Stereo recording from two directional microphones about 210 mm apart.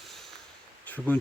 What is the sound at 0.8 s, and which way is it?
Speech, 10° left (ahead or behind).